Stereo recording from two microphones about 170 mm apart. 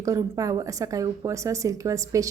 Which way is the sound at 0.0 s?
20° right (ahead or behind).